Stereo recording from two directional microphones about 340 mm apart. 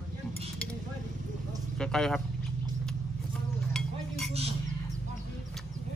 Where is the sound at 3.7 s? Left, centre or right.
Centre.